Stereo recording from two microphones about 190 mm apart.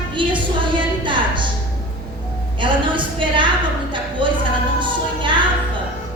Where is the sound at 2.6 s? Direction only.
25° right (ahead or behind).